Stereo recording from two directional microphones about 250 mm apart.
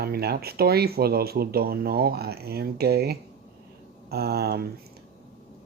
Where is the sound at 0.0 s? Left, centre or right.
Right.